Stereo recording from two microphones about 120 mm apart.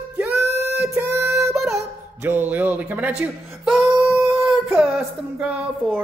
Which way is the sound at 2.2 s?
15° right (ahead or behind).